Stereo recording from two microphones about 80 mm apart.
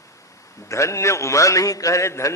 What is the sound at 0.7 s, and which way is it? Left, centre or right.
A man's voice, left.